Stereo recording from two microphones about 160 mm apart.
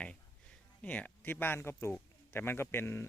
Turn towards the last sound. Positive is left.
turn(degrees=15)  # may be behind; listen again after turning